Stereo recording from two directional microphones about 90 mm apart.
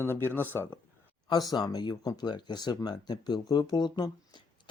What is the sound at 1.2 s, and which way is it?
Speech, 50° left (ahead or behind).